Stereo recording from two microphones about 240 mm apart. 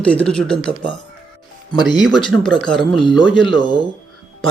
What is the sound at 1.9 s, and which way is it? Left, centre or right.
Speech, centre.